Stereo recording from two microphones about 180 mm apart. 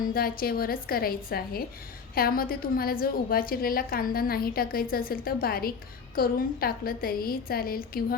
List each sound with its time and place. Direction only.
0.1 s a woman's voice: 55° left (ahead or behind)